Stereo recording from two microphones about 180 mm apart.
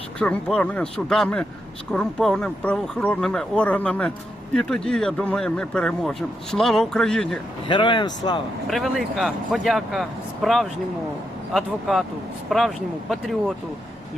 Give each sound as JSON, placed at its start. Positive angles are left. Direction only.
{"t": 0.2, "sound": "speech", "side_deg": 5}
{"t": 7.7, "sound": "speech", "side_deg": 25}
{"t": 8.6, "sound": "speech", "side_deg": 0}